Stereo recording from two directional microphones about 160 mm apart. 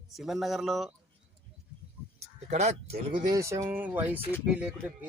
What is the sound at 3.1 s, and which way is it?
Speech, 30° right (ahead or behind).